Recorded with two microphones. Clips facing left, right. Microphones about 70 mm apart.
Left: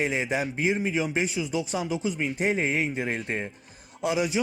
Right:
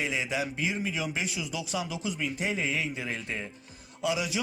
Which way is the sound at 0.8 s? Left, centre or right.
Left.